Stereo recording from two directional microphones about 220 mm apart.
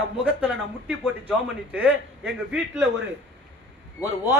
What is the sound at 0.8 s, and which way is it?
A man's voice, 5° right (ahead or behind).